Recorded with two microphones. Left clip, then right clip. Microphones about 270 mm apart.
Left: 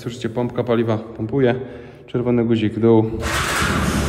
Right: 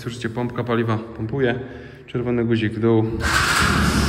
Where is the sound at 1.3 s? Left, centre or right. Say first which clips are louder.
Left 4 dB; left.